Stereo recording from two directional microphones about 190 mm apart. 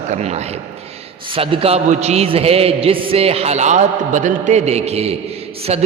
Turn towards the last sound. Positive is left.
turn(degrees=-35)  # may be behind; listen again after turning